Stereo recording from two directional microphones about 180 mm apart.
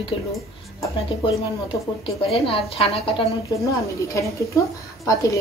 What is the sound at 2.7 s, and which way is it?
Speech, 30° left (ahead or behind).